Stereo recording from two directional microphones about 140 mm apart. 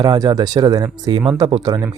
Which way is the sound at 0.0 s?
30° right (ahead or behind).